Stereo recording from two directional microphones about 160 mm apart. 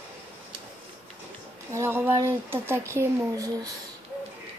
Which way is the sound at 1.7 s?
15° right (ahead or behind).